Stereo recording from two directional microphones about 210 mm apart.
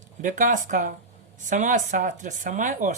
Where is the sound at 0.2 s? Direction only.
40° right (ahead or behind).